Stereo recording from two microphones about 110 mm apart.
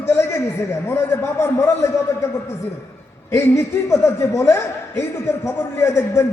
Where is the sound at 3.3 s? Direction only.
25° left (ahead or behind).